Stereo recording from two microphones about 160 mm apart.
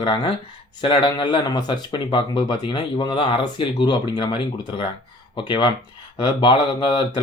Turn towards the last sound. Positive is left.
turn(degrees=30)  # may be behind; listen again after turning